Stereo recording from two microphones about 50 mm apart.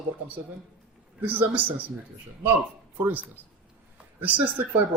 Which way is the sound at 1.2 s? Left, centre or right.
Right.